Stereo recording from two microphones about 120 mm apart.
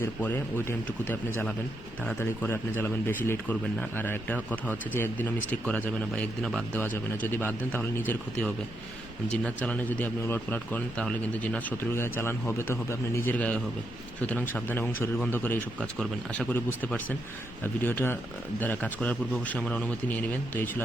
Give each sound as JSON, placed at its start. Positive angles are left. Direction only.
{"t": 0.0, "sound": "speech", "side_deg": 20}